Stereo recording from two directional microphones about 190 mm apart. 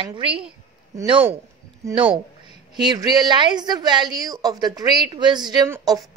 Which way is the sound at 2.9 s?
20° right (ahead or behind).